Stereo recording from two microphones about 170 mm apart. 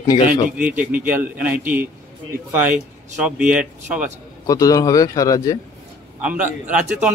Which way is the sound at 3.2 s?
5° right (ahead or behind).